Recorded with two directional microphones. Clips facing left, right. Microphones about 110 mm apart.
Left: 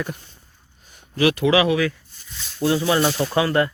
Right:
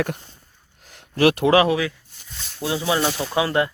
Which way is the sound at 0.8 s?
90° right.